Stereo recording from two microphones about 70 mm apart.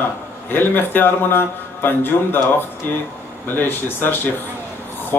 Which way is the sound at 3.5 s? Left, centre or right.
Left.